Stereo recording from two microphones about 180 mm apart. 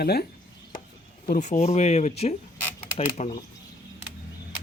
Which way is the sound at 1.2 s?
45° left (ahead or behind).